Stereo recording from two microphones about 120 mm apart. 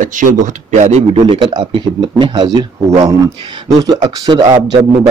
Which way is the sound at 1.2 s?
40° right (ahead or behind).